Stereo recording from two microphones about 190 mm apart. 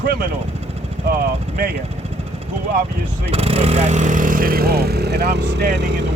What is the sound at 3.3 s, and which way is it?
Speech, 30° right (ahead or behind).